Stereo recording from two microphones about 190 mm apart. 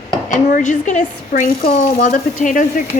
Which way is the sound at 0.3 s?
40° left (ahead or behind).